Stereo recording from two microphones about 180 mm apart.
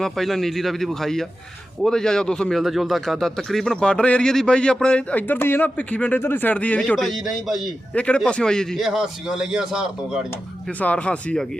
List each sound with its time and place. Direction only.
0.0 s a man's voice: centre (ahead or behind)
10.8 s speech: 5° left (ahead or behind)